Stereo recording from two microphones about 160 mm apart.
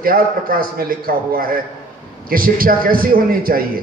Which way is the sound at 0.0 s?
60° right (ahead or behind).